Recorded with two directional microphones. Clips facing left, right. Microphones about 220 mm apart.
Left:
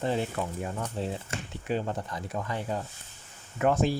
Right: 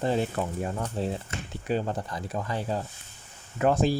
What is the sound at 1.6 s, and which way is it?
Speech, 35° right (ahead or behind).